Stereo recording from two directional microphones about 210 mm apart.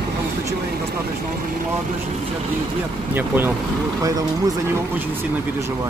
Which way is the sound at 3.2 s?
10° right (ahead or behind).